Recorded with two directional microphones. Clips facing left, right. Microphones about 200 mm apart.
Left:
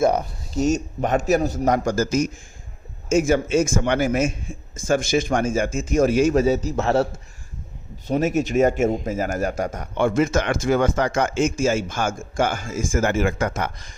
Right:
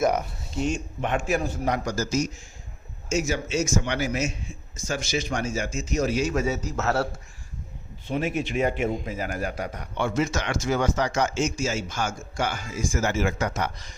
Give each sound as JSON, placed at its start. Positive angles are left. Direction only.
{"t": 0.0, "sound": "a man's voice", "side_deg": 30}
{"t": 6.3, "sound": "a man's voice", "side_deg": 30}
{"t": 6.7, "sound": "a man's voice", "side_deg": 20}
{"t": 8.0, "sound": "speech", "side_deg": 40}